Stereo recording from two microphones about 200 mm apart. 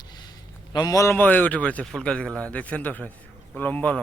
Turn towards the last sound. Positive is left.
turn(degrees=5)  # may be behind; listen again after turning